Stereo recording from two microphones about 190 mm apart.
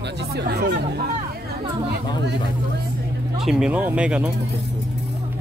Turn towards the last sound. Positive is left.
turn(degrees=-5)  # may be behind; listen again after turning